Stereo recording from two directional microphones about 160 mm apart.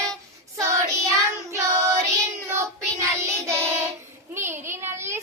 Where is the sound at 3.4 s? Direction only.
15° right (ahead or behind).